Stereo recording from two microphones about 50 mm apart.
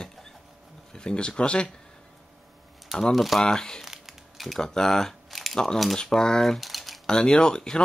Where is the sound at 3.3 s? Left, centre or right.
Centre.